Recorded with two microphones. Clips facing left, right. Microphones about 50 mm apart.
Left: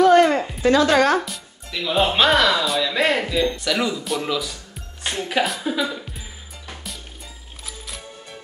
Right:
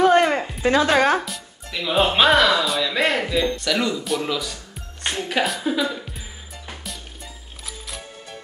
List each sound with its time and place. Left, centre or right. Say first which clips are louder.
0.0 s a sound: left 2 dB; centre
0.7 s speech: left 1 dB; centre
1.2 s speech: right 1 dB; centre